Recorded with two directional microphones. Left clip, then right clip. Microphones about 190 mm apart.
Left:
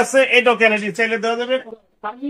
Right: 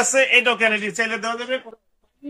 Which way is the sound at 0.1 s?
30° left (ahead or behind).